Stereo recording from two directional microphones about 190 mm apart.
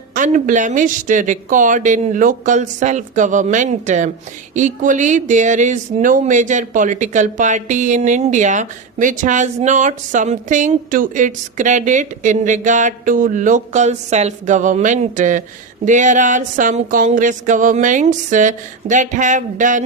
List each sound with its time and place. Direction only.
0.1 s speech: 40° right (ahead or behind)